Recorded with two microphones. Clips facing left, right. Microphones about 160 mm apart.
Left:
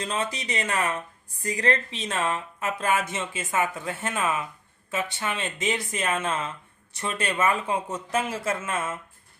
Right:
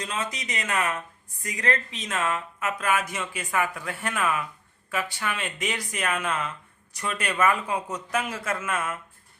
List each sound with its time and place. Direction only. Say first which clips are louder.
0.0 s speech: left 3 dB; 30° left (ahead or behind)